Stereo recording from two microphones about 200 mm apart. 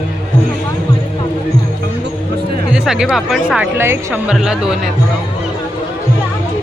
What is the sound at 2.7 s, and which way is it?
Speech, 5° right (ahead or behind).